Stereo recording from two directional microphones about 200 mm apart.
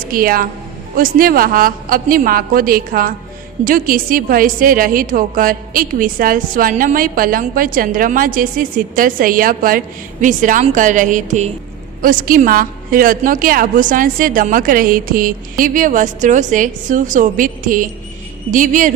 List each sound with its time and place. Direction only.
0.1 s a woman's voice: 45° right (ahead or behind)